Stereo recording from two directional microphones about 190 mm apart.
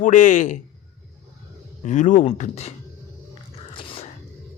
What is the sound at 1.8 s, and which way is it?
Speech, 40° left (ahead or behind).